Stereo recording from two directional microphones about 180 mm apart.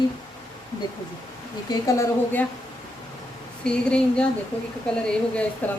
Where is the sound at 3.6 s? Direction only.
5° left (ahead or behind).